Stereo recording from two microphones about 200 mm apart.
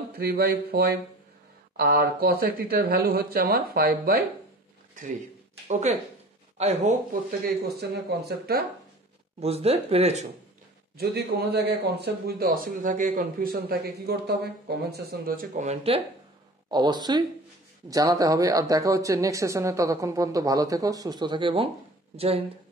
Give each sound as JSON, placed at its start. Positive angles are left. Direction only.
{"t": 0.1, "sound": "a man's voice", "side_deg": -50}
{"t": 5.7, "sound": "speech", "side_deg": -35}
{"t": 7.6, "sound": "a man's voice", "side_deg": -55}
{"t": 9.4, "sound": "speech", "side_deg": -30}
{"t": 11.0, "sound": "a man's voice", "side_deg": -55}
{"t": 16.7, "sound": "speech", "side_deg": -20}